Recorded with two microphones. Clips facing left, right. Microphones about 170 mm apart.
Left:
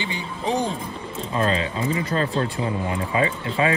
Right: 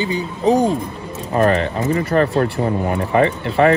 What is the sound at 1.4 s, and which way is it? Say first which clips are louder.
Speech: right 7 dB; 65° right (ahead or behind).